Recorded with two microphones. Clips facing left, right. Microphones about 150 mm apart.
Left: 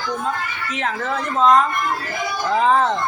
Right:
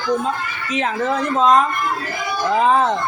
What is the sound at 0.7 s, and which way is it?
A woman's voice, 15° right (ahead or behind).